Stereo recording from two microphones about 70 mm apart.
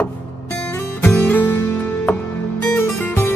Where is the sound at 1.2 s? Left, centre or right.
Left.